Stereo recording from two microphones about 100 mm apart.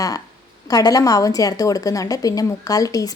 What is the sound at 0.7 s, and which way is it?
A woman's voice, 40° left (ahead or behind).